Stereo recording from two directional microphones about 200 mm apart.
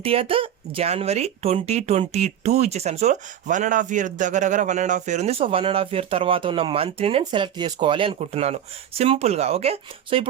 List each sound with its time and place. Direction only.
0.0 s speech: 30° right (ahead or behind)